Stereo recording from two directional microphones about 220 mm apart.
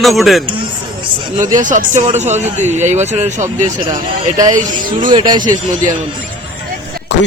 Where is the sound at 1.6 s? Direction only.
35° right (ahead or behind).